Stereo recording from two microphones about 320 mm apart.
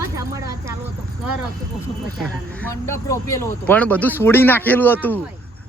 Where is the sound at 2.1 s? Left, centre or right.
Centre.